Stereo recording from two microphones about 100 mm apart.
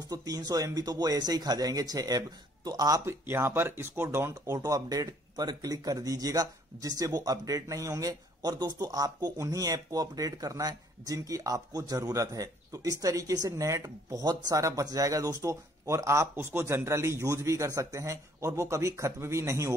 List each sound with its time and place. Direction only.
0.1 s speech: 40° right (ahead or behind)
3.1 s speech: 25° right (ahead or behind)